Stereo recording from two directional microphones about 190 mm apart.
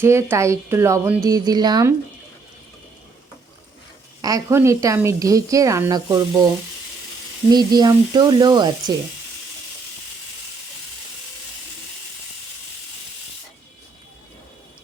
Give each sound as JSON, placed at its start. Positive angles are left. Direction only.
{"t": 0.0, "sound": "a woman's voice", "side_deg": -15}
{"t": 4.2, "sound": "a woman's voice", "side_deg": -20}
{"t": 7.5, "sound": "speech", "side_deg": -20}